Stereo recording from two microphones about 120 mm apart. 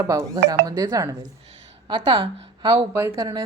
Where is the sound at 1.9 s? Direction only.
40° right (ahead or behind).